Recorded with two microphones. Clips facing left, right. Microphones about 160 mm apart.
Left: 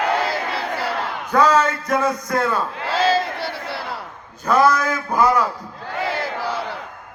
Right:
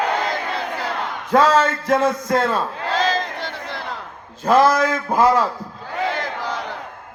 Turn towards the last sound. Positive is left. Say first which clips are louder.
# left 1 dB
turn(degrees=10)  # may be behind; listen again after turning